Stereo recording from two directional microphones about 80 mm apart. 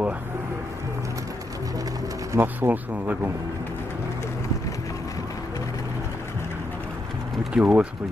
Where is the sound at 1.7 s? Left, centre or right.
Right.